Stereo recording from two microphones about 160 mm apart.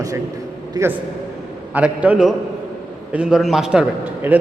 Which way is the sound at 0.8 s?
15° right (ahead or behind).